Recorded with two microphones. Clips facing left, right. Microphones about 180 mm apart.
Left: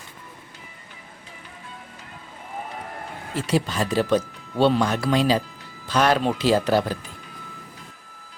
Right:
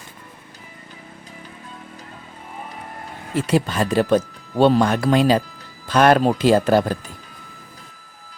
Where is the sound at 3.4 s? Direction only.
55° right (ahead or behind).